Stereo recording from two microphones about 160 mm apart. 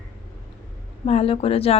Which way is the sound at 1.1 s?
40° left (ahead or behind).